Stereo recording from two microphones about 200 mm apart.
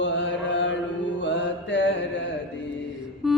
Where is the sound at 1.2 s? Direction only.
65° left (ahead or behind).